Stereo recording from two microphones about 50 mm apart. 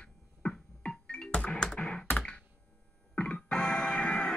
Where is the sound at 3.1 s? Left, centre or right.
Left.